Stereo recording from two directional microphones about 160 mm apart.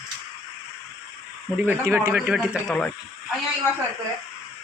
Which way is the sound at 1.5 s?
10° right (ahead or behind).